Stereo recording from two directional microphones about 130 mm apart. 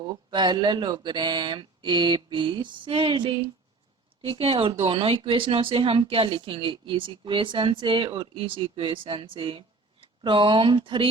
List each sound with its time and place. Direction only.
0.0 s speech: 35° right (ahead or behind)